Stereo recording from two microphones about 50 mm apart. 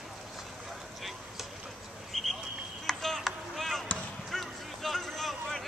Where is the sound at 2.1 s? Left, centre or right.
Centre.